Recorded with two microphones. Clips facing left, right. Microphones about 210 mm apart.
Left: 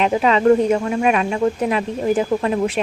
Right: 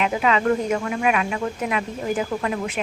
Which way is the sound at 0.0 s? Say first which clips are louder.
Left 5 dB; 30° left (ahead or behind).